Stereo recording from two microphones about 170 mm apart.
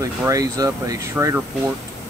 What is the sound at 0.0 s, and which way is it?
Speech, 20° right (ahead or behind).